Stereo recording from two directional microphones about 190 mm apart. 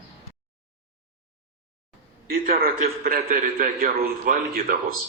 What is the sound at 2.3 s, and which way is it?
A man's voice, 50° right (ahead or behind).